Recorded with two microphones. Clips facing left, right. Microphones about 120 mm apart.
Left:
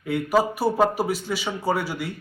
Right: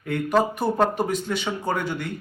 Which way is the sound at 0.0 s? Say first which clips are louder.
Even; 5° left (ahead or behind).